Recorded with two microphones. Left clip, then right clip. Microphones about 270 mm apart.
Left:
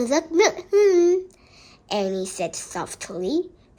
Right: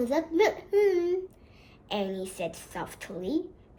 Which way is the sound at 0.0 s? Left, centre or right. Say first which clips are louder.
Left 6 dB; left.